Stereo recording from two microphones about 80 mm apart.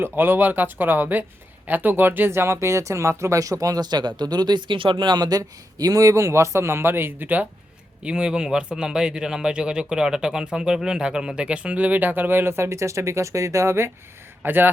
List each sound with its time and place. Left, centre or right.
0.0 s speech: right
8.0 s speech: centre; by 14.7 s right